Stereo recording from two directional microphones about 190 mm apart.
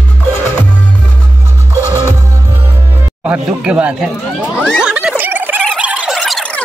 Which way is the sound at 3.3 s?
5° right (ahead or behind).